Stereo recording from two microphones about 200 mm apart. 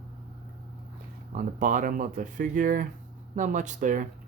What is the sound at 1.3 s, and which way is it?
Speech, 40° right (ahead or behind).